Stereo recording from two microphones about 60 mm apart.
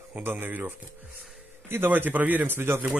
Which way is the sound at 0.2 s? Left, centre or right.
Right.